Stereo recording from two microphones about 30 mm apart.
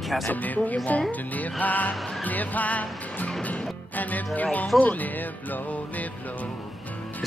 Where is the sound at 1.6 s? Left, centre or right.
Left.